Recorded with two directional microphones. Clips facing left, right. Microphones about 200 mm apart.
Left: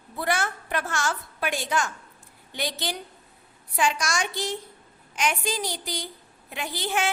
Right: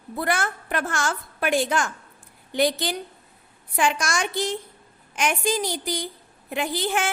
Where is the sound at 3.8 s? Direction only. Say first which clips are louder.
Right 2 dB; 55° right (ahead or behind).